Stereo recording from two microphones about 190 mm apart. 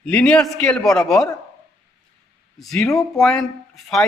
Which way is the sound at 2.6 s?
5° left (ahead or behind).